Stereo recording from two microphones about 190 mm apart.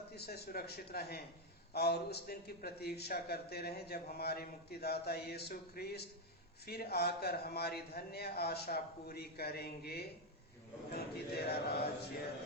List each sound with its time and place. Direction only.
0.1 s a man's voice: 55° left (ahead or behind)